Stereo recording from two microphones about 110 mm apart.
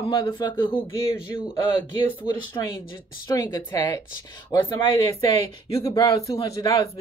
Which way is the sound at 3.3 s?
35° left (ahead or behind).